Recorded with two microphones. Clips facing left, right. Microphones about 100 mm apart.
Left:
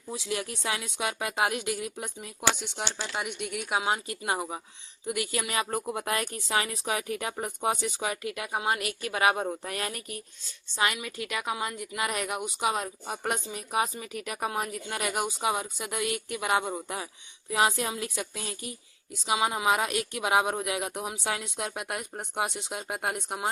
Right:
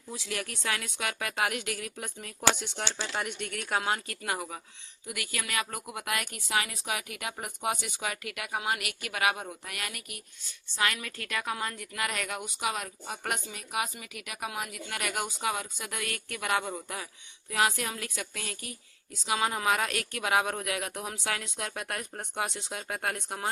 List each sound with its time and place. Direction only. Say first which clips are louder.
0.1 s a woman's voice: left 4 dB; 20° left (ahead or behind)
2.1 s a woman's voice: right 2 dB; 10° left (ahead or behind); by 10.2 s 30° left (ahead or behind)
10.8 s a woman's voice: left 2 dB; 20° left (ahead or behind)